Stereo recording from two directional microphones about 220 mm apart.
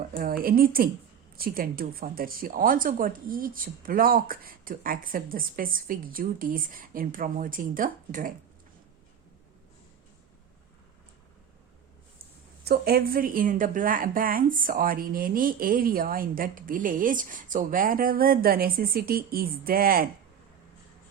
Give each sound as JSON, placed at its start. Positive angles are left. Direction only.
{"t": 0.2, "sound": "a woman's voice", "side_deg": -40}
{"t": 12.6, "sound": "a woman's voice", "side_deg": -45}